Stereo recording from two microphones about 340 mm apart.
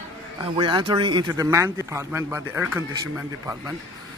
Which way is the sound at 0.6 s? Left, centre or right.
Centre.